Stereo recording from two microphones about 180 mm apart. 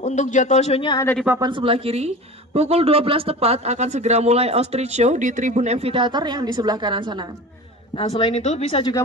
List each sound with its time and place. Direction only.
0.0 s speech: 40° left (ahead or behind)
1.4 s a woman's voice: 30° right (ahead or behind)
7.9 s speech: 30° left (ahead or behind)